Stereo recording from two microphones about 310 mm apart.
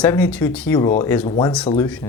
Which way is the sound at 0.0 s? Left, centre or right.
Centre.